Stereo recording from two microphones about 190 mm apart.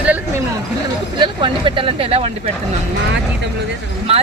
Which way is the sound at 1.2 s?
25° right (ahead or behind).